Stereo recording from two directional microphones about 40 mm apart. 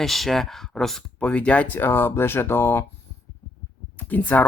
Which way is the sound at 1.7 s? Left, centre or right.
Left.